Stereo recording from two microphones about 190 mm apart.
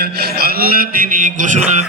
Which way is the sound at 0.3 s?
55° right (ahead or behind).